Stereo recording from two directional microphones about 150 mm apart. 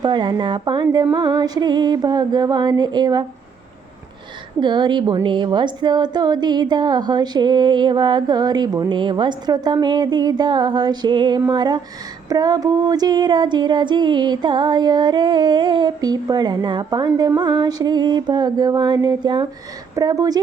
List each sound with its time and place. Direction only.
0.0 s speech: 30° right (ahead or behind)
4.6 s speech: 30° right (ahead or behind)